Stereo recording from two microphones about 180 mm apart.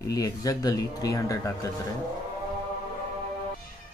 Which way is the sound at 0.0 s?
20° left (ahead or behind).